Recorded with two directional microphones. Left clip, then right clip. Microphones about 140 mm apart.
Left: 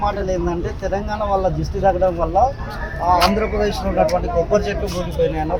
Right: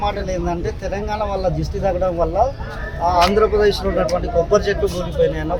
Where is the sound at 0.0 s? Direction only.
25° right (ahead or behind).